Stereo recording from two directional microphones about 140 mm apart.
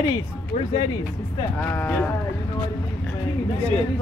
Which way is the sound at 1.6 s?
15° left (ahead or behind).